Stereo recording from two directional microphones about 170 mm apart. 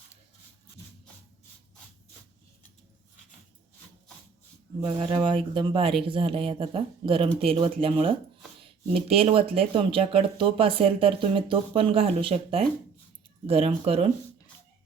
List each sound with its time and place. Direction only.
4.8 s speech: 30° right (ahead or behind)